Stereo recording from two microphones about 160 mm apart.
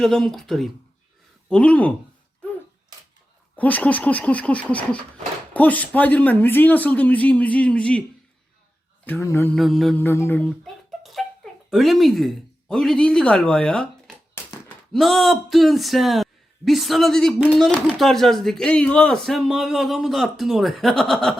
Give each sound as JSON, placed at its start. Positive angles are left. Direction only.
{"t": 0.0, "sound": "speech", "side_deg": 0}
{"t": 3.5, "sound": "speech", "side_deg": 10}
{"t": 9.0, "sound": "speech", "side_deg": 20}
{"t": 9.6, "sound": "speech", "side_deg": 0}
{"t": 10.0, "sound": "speech", "side_deg": 15}
{"t": 10.6, "sound": "a sound", "side_deg": 0}
{"t": 11.7, "sound": "speech", "side_deg": 0}
{"t": 14.4, "sound": "a sound", "side_deg": 15}
{"t": 14.9, "sound": "speech", "side_deg": 0}